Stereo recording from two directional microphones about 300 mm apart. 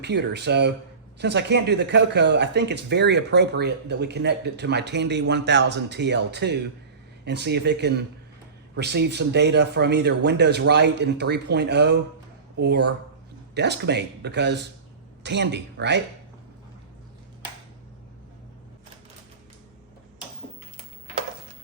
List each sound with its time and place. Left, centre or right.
0.0 s speech: right